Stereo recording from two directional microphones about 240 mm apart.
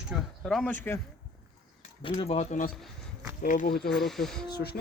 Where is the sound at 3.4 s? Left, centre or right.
Left.